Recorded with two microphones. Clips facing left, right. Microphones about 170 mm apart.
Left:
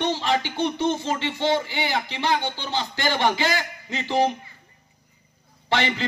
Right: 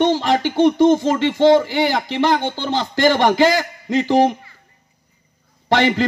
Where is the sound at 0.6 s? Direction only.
45° right (ahead or behind).